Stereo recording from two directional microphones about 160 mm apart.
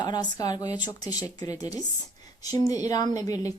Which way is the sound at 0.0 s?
25° left (ahead or behind).